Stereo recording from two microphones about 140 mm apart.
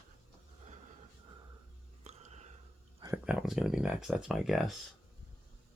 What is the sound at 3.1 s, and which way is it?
Speech, 10° right (ahead or behind).